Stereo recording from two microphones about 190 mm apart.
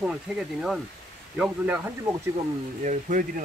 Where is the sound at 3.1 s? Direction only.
40° right (ahead or behind).